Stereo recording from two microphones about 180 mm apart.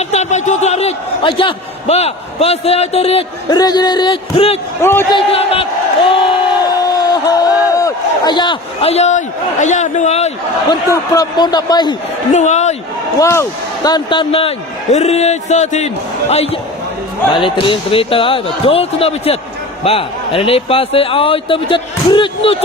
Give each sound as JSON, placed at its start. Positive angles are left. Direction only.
{"t": 0.0, "sound": "a man's voice", "side_deg": 40}
{"t": 4.8, "sound": "a man's voice", "side_deg": 15}
{"t": 5.1, "sound": "a man's voice", "side_deg": 30}
{"t": 6.8, "sound": "speech", "side_deg": 20}
{"t": 10.7, "sound": "speech", "side_deg": 20}
{"t": 12.3, "sound": "a man's voice", "side_deg": 40}
{"t": 13.1, "sound": "a man's voice", "side_deg": 15}